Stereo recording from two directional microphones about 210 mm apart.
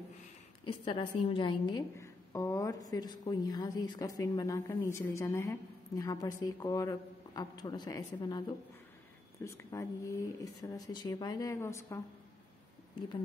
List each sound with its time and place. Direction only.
0.7 s a woman's voice: 25° left (ahead or behind)